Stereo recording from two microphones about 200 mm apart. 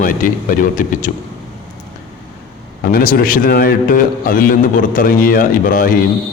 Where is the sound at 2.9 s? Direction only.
45° left (ahead or behind).